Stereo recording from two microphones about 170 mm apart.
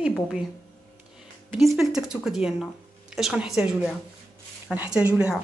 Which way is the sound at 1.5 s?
Centre (ahead or behind).